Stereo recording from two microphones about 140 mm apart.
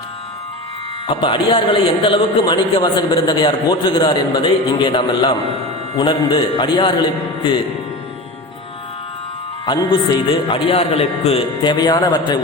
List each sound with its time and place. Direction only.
1.0 s a man's voice: 35° left (ahead or behind)
9.6 s a man's voice: 30° left (ahead or behind)